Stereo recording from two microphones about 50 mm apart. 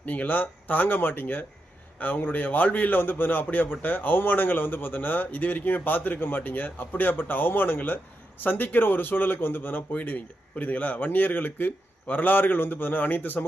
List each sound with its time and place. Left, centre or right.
0.0 s a man's voice: left
9.9 s a man's voice: left